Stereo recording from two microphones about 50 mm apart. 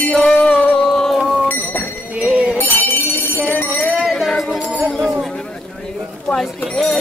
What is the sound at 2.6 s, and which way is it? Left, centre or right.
Bell, left.